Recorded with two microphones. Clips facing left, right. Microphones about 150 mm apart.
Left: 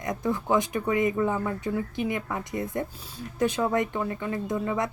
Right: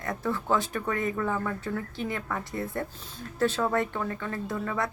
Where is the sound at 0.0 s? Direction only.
15° left (ahead or behind).